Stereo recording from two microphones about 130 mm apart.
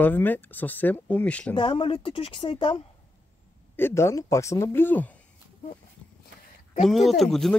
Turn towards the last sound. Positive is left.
turn(degrees=0)  # may be behind; listen again after turning